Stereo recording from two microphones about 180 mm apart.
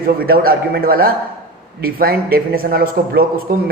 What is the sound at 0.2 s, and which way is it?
Speech, 55° right (ahead or behind).